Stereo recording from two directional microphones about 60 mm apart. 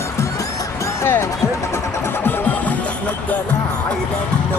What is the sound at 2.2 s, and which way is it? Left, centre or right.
Music, left.